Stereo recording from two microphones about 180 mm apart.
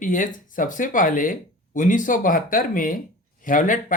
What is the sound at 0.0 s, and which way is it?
Speech, 50° left (ahead or behind).